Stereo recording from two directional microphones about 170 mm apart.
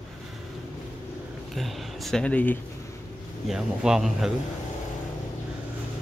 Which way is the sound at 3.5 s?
5° right (ahead or behind).